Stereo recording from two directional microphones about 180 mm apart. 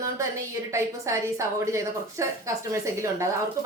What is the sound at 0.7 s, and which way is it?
A woman's voice, 15° right (ahead or behind).